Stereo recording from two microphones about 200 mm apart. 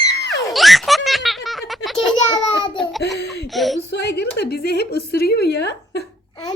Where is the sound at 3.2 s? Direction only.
55° left (ahead or behind).